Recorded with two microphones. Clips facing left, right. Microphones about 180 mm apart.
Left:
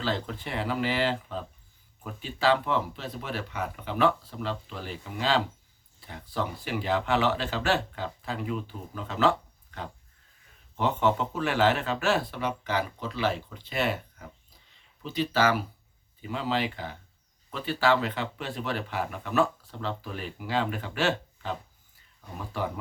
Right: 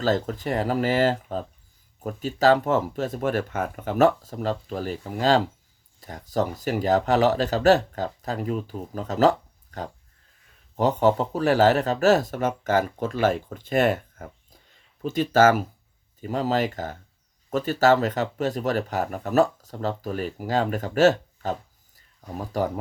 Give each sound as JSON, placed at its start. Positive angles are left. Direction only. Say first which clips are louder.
{"t": 0.0, "sound": "speech", "louder": "right 7 dB", "side_deg": -45}